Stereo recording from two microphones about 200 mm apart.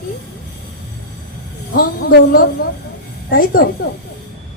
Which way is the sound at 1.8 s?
50° left (ahead or behind).